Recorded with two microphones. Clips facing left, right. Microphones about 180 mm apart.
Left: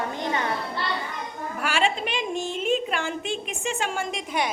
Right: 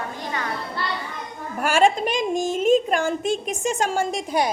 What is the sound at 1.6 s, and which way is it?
A woman's voice, 45° right (ahead or behind).